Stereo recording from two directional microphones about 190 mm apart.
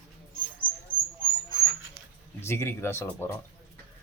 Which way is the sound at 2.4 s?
15° left (ahead or behind).